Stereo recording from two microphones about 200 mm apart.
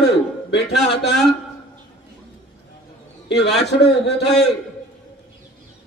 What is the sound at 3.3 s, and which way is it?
A man's voice, 55° left (ahead or behind).